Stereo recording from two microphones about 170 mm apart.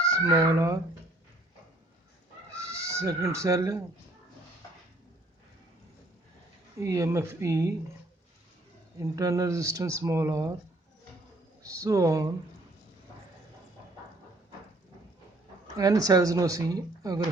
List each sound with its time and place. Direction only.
0.0 s speech: 20° right (ahead or behind)
2.6 s speech: 15° right (ahead or behind)
6.7 s speech: 20° right (ahead or behind)
9.0 s speech: 20° right (ahead or behind)
11.6 s speech: 20° right (ahead or behind)
15.8 s speech: 20° right (ahead or behind)